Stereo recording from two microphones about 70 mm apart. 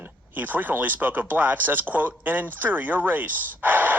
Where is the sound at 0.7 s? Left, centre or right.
Right.